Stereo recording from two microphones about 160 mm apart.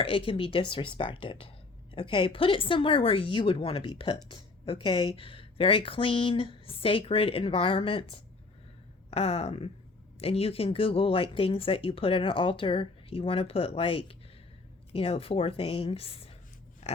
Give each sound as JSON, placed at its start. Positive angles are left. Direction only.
{"t": 0.0, "sound": "speech", "side_deg": 35}
{"t": 16.8, "sound": "pig", "side_deg": 45}